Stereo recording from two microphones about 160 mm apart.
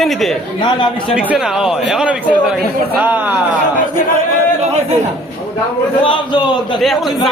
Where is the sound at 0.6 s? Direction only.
30° left (ahead or behind).